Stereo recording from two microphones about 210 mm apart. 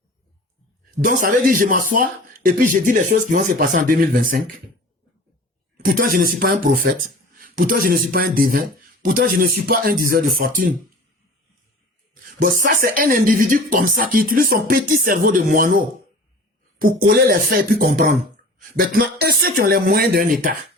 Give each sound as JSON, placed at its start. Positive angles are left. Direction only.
{"t": 1.0, "sound": "speech", "side_deg": -40}
{"t": 5.7, "sound": "a sound", "side_deg": -40}
{"t": 6.1, "sound": "speech", "side_deg": -45}
{"t": 12.2, "sound": "speech", "side_deg": -40}
{"t": 16.8, "sound": "speech", "side_deg": -45}